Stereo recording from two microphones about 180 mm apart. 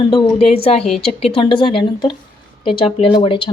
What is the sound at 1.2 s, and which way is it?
Speech, 30° left (ahead or behind).